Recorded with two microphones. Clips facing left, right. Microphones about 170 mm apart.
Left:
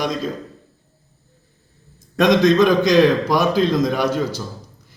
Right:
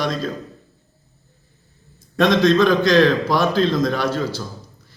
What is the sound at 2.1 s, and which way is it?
A man's voice, 15° left (ahead or behind).